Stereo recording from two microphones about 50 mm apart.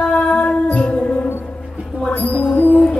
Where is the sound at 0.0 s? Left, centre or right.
Left.